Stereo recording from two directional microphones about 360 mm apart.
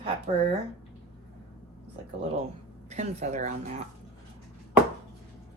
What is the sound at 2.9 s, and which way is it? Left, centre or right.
Speech, centre.